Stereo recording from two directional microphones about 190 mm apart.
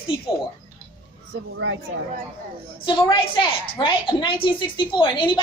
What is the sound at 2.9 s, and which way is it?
Speech, 25° left (ahead or behind).